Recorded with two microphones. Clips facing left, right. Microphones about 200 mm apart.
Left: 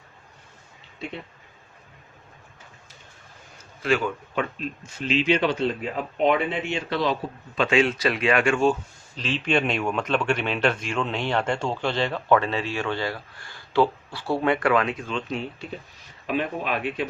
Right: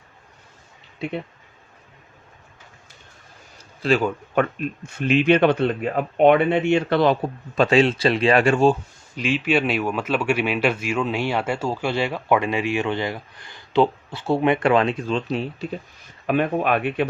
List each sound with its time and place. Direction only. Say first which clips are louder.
3.8 s speech: right 4 dB; 35° right (ahead or behind)
4.4 s speech: right 8 dB; 55° right (ahead or behind)
7.6 s speech: right 4 dB; 35° right (ahead or behind)
9.1 s speech: right 3 dB; 10° right (ahead or behind); by 15.6 s 35° right (ahead or behind)
16.2 s speech: right 6 dB; 55° right (ahead or behind)